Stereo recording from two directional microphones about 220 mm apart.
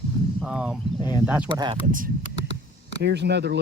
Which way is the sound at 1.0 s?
20° left (ahead or behind).